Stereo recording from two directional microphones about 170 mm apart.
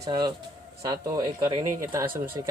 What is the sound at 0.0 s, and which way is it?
Speech, 25° right (ahead or behind).